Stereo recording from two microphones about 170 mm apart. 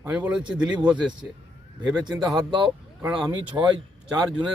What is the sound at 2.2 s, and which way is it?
Speech, 25° right (ahead or behind).